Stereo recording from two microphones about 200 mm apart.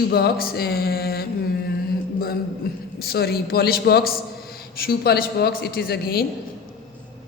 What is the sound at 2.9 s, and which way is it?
Mantra, 50° left (ahead or behind).